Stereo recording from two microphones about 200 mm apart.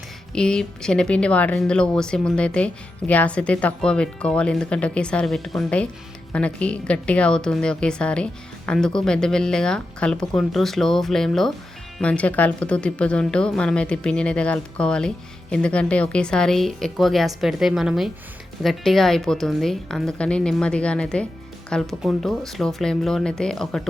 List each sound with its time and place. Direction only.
0.3 s speech: 5° left (ahead or behind)